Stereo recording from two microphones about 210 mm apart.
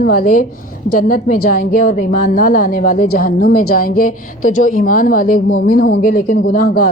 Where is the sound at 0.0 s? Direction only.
45° left (ahead or behind).